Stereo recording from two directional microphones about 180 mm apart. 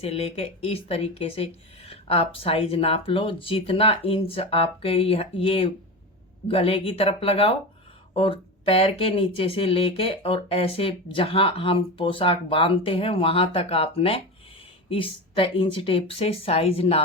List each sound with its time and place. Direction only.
0.0 s speech: 35° left (ahead or behind)